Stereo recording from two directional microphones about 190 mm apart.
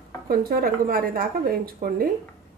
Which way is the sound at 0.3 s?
50° right (ahead or behind).